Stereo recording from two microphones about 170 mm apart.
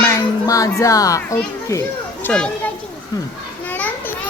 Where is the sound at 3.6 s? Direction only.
10° left (ahead or behind).